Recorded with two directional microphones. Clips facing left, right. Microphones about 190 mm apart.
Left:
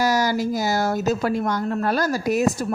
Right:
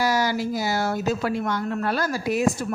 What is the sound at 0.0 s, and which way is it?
Speech, 40° left (ahead or behind).